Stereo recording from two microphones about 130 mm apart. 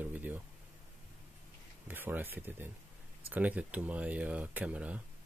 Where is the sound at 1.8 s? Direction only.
15° right (ahead or behind).